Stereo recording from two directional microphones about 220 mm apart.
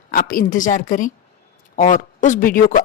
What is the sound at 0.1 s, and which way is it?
A woman's voice, 40° left (ahead or behind).